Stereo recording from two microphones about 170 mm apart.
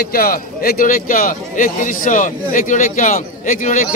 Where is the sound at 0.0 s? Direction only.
60° left (ahead or behind).